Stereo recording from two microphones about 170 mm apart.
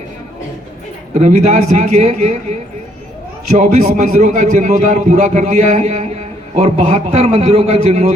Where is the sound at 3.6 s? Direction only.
45° right (ahead or behind).